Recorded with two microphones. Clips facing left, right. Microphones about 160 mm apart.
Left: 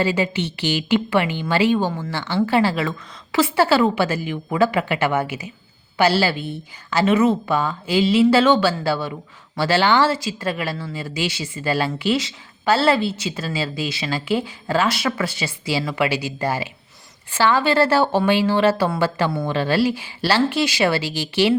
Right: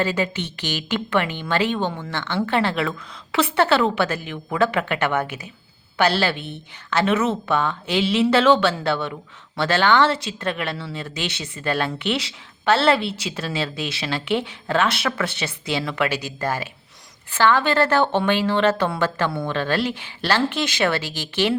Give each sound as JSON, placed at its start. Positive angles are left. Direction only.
{"t": 0.0, "sound": "speech", "side_deg": 10}